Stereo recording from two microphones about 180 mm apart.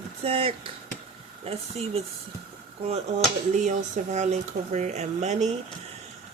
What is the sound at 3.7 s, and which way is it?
Speech, 40° right (ahead or behind).